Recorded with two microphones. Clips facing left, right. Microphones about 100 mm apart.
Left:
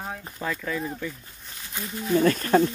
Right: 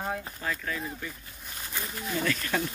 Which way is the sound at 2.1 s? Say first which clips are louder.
Left 10 dB; 40° left (ahead or behind).